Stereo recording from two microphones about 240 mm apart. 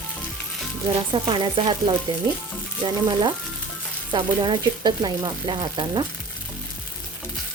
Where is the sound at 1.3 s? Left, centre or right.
Centre.